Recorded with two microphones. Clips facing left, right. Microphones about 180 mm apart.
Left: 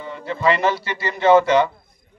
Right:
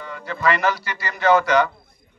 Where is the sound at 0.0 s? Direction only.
25° left (ahead or behind).